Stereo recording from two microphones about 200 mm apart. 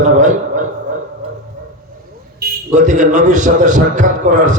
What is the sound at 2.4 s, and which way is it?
A man's voice, 40° right (ahead or behind).